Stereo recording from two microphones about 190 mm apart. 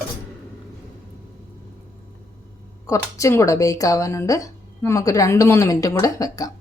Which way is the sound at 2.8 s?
15° left (ahead or behind).